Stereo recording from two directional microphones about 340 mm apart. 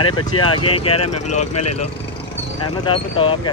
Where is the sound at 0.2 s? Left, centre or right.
Centre.